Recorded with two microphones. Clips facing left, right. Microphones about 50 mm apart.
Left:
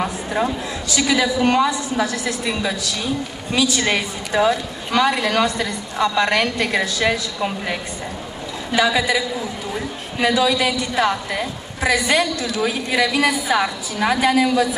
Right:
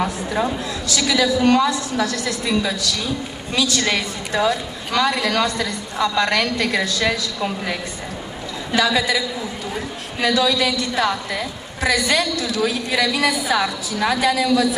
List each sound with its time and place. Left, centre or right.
0.4 s a woman's voice: left